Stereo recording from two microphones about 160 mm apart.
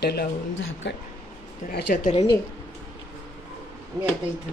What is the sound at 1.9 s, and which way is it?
Speech, 65° left (ahead or behind).